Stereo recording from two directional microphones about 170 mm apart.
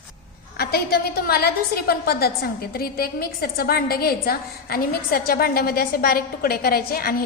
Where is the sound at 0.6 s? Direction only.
65° left (ahead or behind).